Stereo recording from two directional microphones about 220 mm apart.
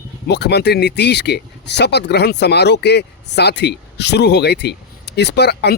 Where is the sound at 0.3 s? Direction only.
50° left (ahead or behind).